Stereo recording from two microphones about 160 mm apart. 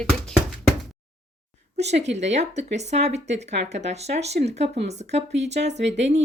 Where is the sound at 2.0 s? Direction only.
45° right (ahead or behind).